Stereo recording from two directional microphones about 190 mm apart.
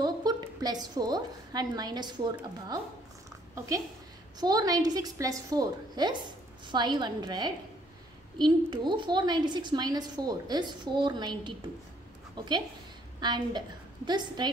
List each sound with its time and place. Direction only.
0.0 s a woman's voice: 20° right (ahead or behind)
13.2 s a woman's voice: 20° right (ahead or behind)